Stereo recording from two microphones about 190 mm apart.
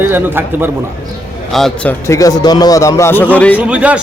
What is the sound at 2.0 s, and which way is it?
Speech, 15° left (ahead or behind).